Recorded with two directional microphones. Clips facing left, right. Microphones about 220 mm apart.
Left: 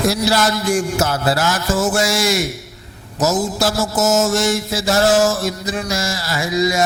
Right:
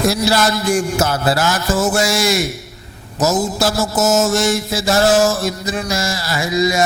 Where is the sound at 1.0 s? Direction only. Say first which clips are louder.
Right 1 dB; 20° right (ahead or behind).